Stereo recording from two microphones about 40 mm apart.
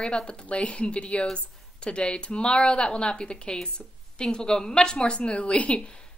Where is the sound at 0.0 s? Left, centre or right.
Left.